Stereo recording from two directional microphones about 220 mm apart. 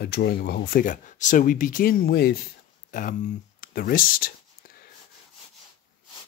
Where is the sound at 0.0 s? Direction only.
45° left (ahead or behind).